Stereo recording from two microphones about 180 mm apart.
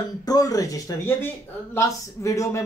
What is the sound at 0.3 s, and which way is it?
A man's voice, 20° left (ahead or behind).